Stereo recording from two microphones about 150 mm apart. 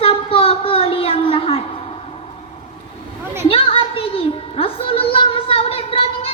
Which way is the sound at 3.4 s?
40° left (ahead or behind).